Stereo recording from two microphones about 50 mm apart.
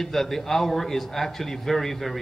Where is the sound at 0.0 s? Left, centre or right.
Centre.